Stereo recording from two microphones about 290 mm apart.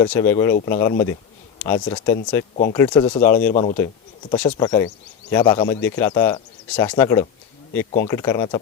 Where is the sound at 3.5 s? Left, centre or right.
Left.